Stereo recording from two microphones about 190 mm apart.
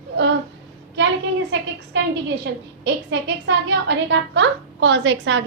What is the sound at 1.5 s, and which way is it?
Speech, 70° right (ahead or behind).